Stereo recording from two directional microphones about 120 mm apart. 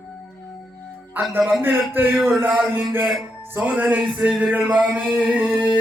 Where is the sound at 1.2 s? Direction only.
15° right (ahead or behind).